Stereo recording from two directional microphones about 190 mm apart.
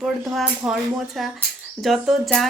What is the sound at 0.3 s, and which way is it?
A woman's voice, centre (ahead or behind).